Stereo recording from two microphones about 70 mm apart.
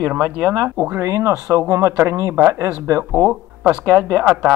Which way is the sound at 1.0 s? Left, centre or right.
Right.